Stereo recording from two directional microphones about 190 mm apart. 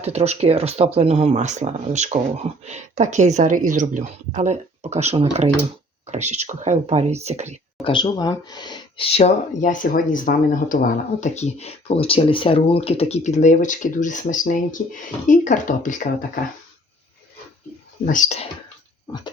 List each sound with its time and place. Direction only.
0.0 s speech: 35° right (ahead or behind)
7.9 s speech: 25° left (ahead or behind); by 16.4 s 45° left (ahead or behind)
18.0 s speech: 40° left (ahead or behind)